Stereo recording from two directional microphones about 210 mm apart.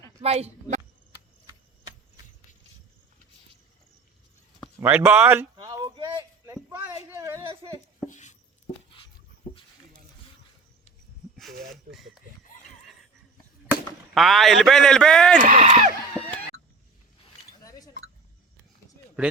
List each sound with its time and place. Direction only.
0.2 s speech: 30° right (ahead or behind)
4.8 s speech: 10° right (ahead or behind)
5.6 s a sound: 20° right (ahead or behind)
8.0 s dog: 35° left (ahead or behind)
11.3 s speech: centre (ahead or behind)
12.5 s neigh: 40° left (ahead or behind)
13.7 s speech: centre (ahead or behind)
15.4 s speech: 35° right (ahead or behind)
17.6 s chink: 15° left (ahead or behind)